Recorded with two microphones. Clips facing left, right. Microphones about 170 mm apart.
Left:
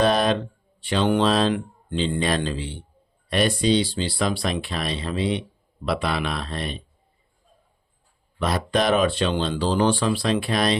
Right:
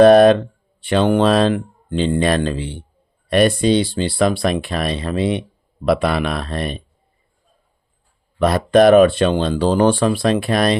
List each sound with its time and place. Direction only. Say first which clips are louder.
0.0 s speech: right 11 dB; 55° right (ahead or behind)
8.4 s speech: right 10 dB; 55° right (ahead or behind)